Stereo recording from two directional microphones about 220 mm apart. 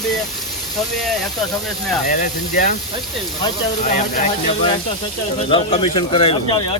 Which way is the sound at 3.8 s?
35° left (ahead or behind).